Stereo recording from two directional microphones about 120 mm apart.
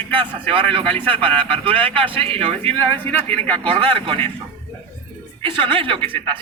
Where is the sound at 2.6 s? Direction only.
15° left (ahead or behind).